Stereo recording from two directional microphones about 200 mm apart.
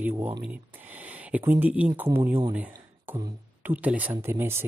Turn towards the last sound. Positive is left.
turn(degrees=-10)  # may be behind; listen again after turning